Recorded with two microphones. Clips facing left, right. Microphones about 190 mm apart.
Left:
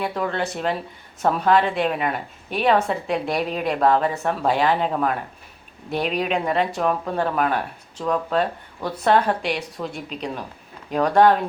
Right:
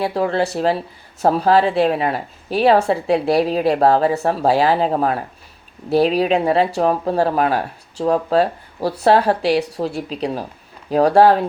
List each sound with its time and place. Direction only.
0.0 s speech: 35° right (ahead or behind)